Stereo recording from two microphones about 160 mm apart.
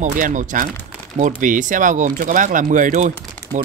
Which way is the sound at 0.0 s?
50° right (ahead or behind).